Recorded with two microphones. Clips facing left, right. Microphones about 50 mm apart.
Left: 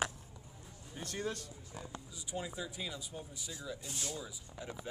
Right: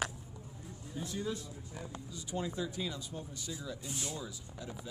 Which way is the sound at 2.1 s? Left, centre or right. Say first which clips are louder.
Right 4 dB; centre.